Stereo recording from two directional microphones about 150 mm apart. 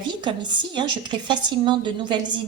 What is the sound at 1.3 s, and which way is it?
A woman's voice, 30° right (ahead or behind).